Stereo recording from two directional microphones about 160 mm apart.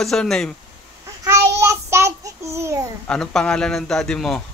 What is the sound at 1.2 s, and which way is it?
Child singing, 20° right (ahead or behind).